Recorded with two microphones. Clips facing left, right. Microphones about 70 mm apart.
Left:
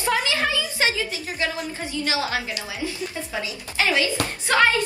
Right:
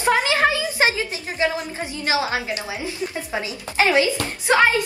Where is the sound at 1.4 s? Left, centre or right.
Right.